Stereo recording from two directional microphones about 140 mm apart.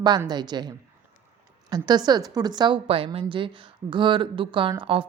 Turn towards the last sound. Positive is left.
turn(degrees=-35)  # may be behind; listen again after turning